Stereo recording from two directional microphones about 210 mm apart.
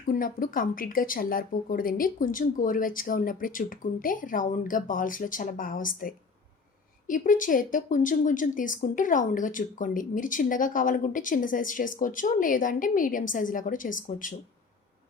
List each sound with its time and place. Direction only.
0.0 s speech: 40° left (ahead or behind)